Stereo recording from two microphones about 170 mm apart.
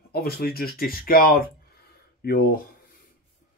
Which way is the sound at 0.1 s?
65° left (ahead or behind).